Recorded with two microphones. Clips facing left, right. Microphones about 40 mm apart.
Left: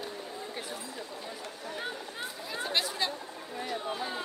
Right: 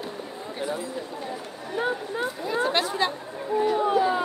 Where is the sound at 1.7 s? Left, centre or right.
Right.